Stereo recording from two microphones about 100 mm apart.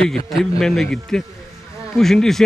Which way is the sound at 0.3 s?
Centre (ahead or behind).